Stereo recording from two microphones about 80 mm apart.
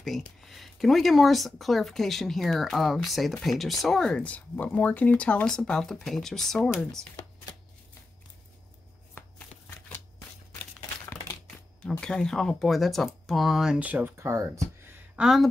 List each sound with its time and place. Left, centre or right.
0.0 s speech: centre
4.2 s speech: centre
9.2 s shuffling cards: left
11.8 s speech: centre
13.7 s speech: centre
14.1 s speech: right
15.1 s speech: centre